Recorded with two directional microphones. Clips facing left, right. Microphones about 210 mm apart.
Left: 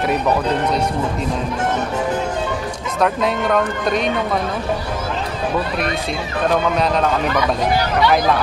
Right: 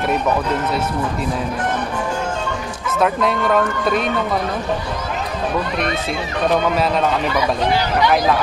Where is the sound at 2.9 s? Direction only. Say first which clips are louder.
Right 1 dB; centre (ahead or behind).